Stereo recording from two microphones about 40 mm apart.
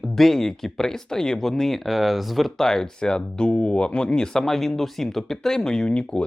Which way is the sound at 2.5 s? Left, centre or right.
Centre.